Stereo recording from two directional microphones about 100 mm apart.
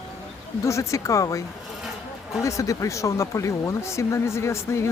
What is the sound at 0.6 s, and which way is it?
Speech, 30° left (ahead or behind).